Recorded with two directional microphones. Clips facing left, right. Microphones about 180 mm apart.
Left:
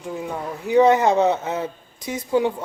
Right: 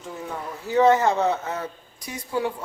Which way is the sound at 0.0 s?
15° left (ahead or behind).